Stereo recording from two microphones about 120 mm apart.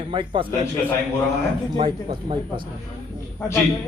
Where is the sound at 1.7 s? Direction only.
45° right (ahead or behind).